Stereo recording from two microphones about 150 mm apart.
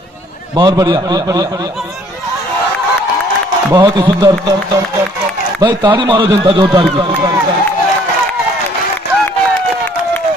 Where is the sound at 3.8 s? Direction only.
30° right (ahead or behind).